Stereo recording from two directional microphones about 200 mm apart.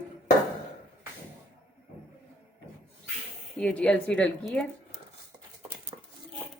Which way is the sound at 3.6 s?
5° left (ahead or behind).